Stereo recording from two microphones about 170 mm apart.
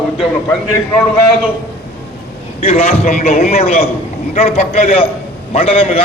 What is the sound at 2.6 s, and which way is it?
A man's voice, 35° left (ahead or behind).